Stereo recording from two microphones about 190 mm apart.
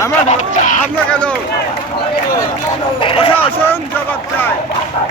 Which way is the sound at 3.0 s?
30° left (ahead or behind).